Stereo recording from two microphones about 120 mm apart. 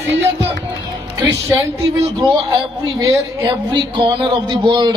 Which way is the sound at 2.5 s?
30° right (ahead or behind).